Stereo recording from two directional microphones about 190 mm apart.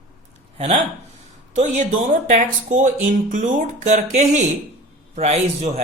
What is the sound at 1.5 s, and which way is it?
Speech, 40° right (ahead or behind).